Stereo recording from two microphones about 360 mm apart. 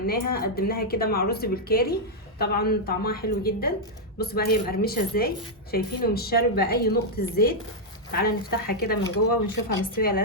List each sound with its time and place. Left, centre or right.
0.1 s a woman's voice: left